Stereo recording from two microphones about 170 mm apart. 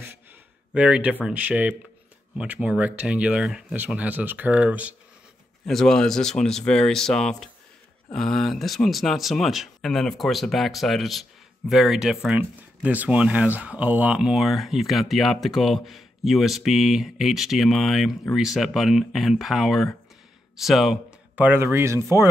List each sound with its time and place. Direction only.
0.7 s speech: 5° right (ahead or behind)
5.7 s speech: centre (ahead or behind); by 22.3 s 15° right (ahead or behind)